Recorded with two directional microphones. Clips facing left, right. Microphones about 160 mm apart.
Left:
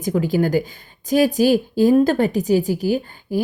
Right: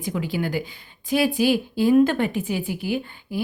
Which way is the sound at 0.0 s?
45° left (ahead or behind).